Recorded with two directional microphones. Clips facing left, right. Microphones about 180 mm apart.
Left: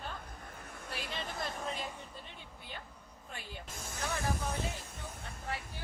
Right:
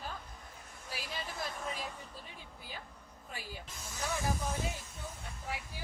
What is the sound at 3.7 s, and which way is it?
Snake, 55° left (ahead or behind).